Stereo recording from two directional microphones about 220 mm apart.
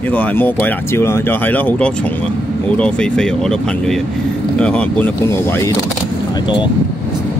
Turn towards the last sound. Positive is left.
turn(degrees=20)  # may be behind; listen again after turning